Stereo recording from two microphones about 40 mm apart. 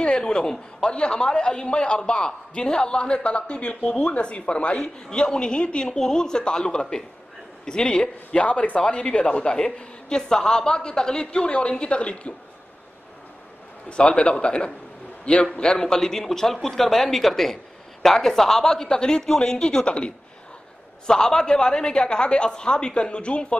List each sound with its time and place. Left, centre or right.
0.0 s a man's voice: left
5.9 s a man's voice: centre
13.8 s a man's voice: left
19.6 s a man's voice: left
21.1 s a man's voice: centre